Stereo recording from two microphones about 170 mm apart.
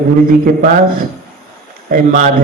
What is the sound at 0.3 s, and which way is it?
Speech, 55° right (ahead or behind).